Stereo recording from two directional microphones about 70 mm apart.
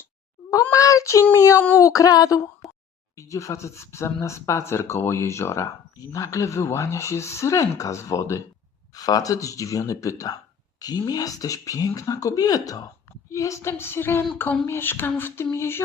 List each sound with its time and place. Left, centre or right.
0.5 s speech: left
1.5 s speech: left
1.8 s speech: left
9.0 s speech: left
10.8 s speech: left
13.3 s speech: left